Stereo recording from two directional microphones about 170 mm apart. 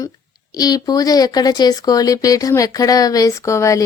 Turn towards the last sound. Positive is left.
turn(degrees=15)  # may be behind; listen again after turning